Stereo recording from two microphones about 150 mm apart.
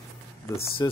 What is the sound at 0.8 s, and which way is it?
Speech, 25° left (ahead or behind).